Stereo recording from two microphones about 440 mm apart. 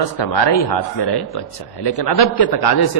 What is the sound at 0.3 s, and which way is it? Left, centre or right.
A man's voice, left.